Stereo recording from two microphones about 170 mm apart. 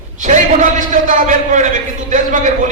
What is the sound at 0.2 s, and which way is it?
A man's voice, 45° right (ahead or behind).